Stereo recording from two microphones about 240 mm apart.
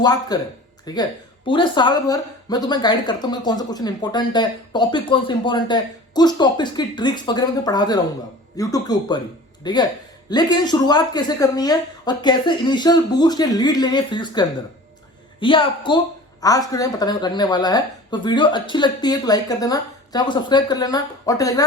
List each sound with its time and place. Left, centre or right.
0.0 s a woman's voice: centre